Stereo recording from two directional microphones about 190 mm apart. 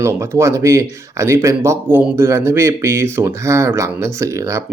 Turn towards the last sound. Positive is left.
turn(degrees=-15)  # may be behind; listen again after turning